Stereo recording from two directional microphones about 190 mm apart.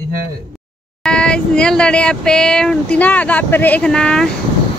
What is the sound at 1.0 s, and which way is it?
Speech, 5° left (ahead or behind).